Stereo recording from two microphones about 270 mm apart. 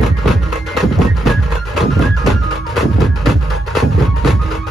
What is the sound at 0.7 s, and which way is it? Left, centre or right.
Music, centre.